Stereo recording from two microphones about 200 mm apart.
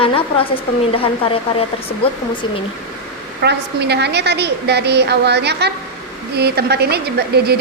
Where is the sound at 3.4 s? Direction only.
55° right (ahead or behind).